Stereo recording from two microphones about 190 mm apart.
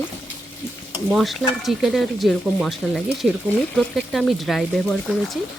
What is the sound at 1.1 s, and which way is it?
Speech, centre (ahead or behind).